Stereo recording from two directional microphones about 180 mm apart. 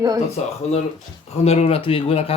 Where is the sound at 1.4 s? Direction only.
35° left (ahead or behind).